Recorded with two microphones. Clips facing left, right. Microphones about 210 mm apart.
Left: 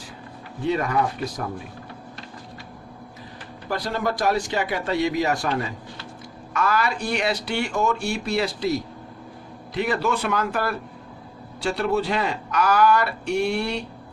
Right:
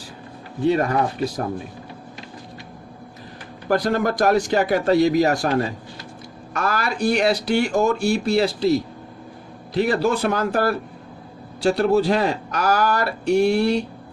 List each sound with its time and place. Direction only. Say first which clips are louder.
0.7 s speech: right 3 dB; 35° right (ahead or behind)
3.7 s speech: right 6 dB; 50° right (ahead or behind)